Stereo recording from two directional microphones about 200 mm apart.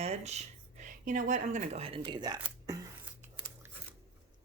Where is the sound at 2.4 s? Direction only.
15° right (ahead or behind).